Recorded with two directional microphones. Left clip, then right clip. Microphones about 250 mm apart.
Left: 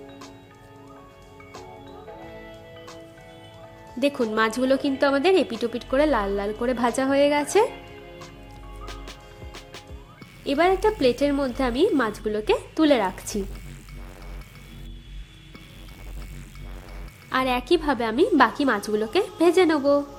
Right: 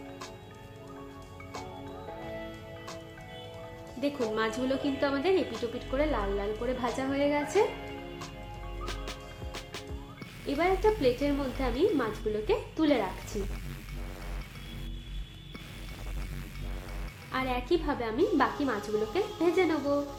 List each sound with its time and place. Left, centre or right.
2.2 s music: centre
4.4 s a woman's voice: left
8.9 s music: centre
10.4 s a woman's voice: left
17.3 s a woman's voice: left